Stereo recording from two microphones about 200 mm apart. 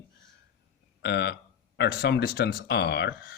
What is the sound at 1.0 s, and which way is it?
Speech, 60° left (ahead or behind).